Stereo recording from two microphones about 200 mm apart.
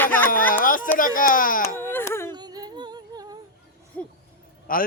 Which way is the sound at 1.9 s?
10° left (ahead or behind).